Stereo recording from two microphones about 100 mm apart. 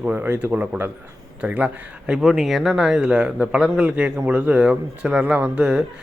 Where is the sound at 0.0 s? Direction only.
20° right (ahead or behind).